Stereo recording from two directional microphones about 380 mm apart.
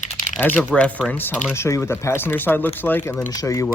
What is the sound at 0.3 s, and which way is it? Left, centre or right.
Speech, centre.